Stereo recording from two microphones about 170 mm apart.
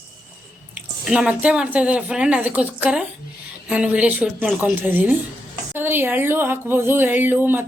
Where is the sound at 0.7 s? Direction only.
5° right (ahead or behind).